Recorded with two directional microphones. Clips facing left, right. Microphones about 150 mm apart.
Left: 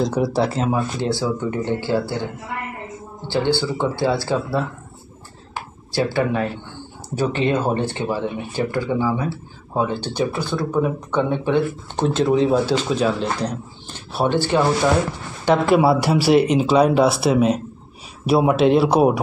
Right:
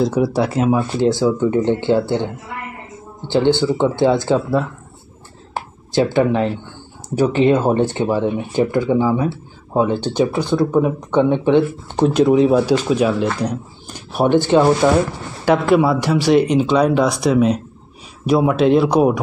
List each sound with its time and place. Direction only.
0.0 s speech: 5° right (ahead or behind)
1.0 s speech: 15° right (ahead or behind)
3.3 s speech: 20° right (ahead or behind)
5.9 s speech: 20° right (ahead or behind)
15.4 s speech: centre (ahead or behind)